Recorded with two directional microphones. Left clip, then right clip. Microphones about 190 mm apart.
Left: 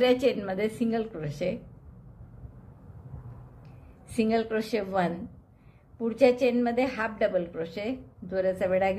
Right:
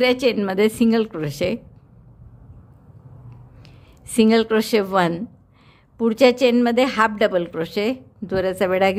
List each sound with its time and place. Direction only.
0.0 s a woman's voice: 35° right (ahead or behind)
3.6 s a woman's voice: 45° right (ahead or behind)